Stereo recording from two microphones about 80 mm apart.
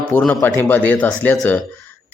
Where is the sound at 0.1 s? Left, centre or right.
Left.